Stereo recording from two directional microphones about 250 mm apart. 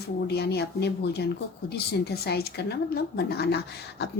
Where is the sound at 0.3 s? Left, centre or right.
Left.